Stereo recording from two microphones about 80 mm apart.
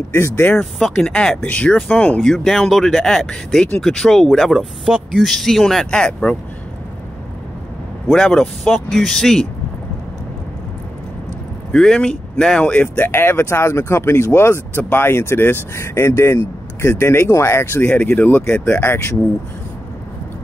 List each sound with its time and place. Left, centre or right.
0.1 s speech: left
0.6 s speech: centre
2.3 s speech: centre
4.6 s speech: centre
8.1 s speech: centre
11.7 s speech: centre; by 19.1 s left